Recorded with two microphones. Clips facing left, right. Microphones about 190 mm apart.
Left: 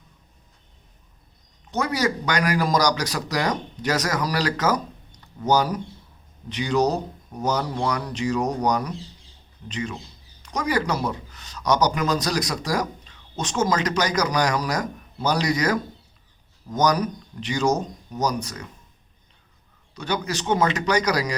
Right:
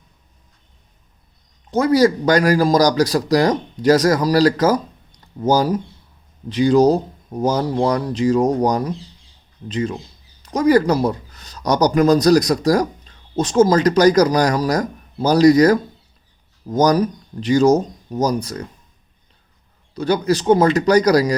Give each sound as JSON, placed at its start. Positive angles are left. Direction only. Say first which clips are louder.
{"t": 1.7, "sound": "speech", "louder": "right 10 dB", "side_deg": -35}
{"t": 19.9, "sound": "speech", "louder": "right 9 dB", "side_deg": -35}